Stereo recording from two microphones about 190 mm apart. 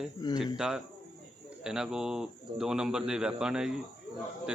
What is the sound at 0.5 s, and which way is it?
A man's voice, centre (ahead or behind).